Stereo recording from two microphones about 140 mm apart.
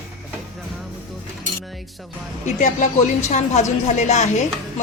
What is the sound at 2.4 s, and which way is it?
A woman's voice, 60° left (ahead or behind).